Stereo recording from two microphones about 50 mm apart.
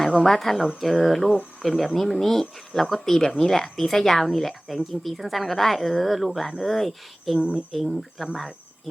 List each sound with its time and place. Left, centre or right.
0.2 s speech: centre
7.3 s speech: centre
7.7 s speech: centre